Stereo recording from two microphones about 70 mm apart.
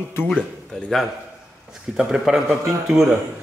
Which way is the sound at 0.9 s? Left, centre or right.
Centre.